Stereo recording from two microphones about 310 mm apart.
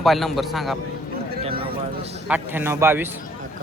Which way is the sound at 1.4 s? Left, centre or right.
Centre.